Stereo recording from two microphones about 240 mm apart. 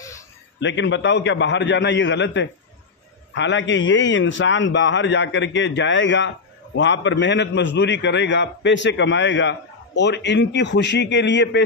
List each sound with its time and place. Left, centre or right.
0.6 s a man's voice: left